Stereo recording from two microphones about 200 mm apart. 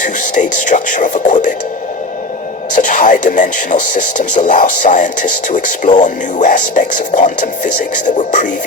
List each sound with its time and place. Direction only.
0.0 s speech: 40° left (ahead or behind)
2.7 s speech: 40° left (ahead or behind)